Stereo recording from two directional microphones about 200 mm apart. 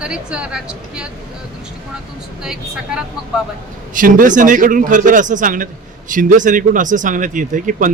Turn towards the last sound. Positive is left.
turn(degrees=-40)  # may be behind; listen again after turning